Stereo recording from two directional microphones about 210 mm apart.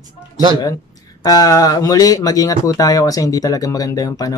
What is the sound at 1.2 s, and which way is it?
Speech, 20° left (ahead or behind).